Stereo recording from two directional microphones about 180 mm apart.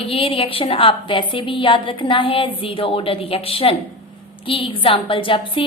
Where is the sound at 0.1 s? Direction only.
30° left (ahead or behind).